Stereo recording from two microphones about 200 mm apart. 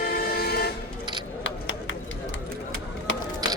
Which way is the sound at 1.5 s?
70° left (ahead or behind).